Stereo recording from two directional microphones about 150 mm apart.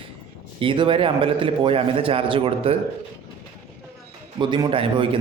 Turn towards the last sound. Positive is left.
turn(degrees=-35)  # may be behind; listen again after turning